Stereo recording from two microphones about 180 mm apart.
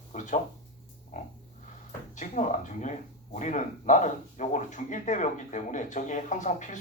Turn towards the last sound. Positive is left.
turn(degrees=45)  # may be behind; listen again after turning